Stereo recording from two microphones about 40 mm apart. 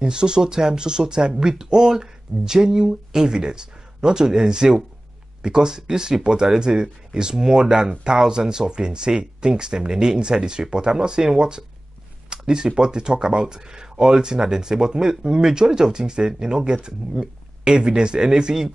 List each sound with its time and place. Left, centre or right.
0.0 s speech: right